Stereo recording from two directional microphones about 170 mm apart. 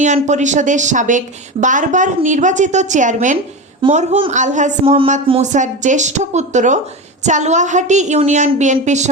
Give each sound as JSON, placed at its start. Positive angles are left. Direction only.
{"t": 0.0, "sound": "a woman's voice", "side_deg": -45}